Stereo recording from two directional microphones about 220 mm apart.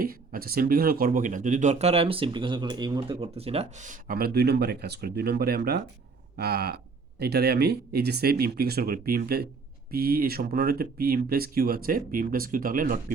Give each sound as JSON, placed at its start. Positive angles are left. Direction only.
{"t": 0.0, "sound": "speech", "side_deg": -40}